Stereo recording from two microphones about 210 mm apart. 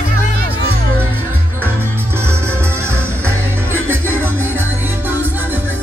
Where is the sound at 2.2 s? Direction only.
10° right (ahead or behind).